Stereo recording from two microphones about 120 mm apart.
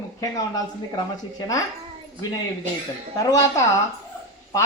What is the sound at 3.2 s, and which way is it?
Speech, 30° left (ahead or behind).